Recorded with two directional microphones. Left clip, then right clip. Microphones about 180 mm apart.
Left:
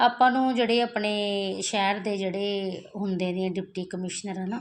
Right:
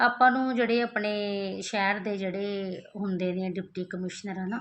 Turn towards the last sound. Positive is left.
turn(degrees=30)  # may be behind; listen again after turning